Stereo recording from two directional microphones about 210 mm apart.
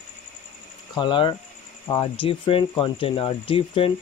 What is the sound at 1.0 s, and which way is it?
Speech, 20° left (ahead or behind).